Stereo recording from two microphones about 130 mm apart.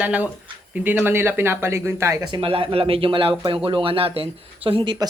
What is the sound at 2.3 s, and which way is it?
Speech, 45° right (ahead or behind).